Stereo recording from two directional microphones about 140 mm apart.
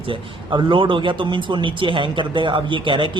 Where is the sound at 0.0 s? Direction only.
35° right (ahead or behind).